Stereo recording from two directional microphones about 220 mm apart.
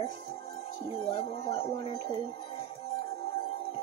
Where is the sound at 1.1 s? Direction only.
25° left (ahead or behind).